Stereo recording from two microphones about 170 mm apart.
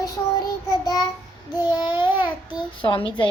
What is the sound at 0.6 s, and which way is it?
Child singing, 20° left (ahead or behind).